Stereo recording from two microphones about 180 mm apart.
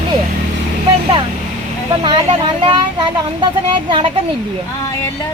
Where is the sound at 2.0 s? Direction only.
25° right (ahead or behind).